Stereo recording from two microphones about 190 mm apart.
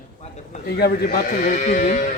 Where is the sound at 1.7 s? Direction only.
40° left (ahead or behind).